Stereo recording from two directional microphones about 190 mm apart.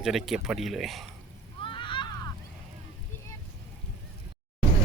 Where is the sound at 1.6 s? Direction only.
25° left (ahead or behind).